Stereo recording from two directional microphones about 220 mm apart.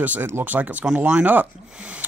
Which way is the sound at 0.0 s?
10° right (ahead or behind).